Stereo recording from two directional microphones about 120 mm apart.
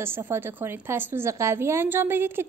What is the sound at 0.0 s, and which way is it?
A woman's voice, 20° right (ahead or behind).